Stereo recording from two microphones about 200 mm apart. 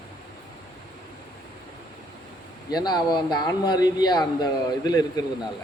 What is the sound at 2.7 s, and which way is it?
Speech, 20° left (ahead or behind).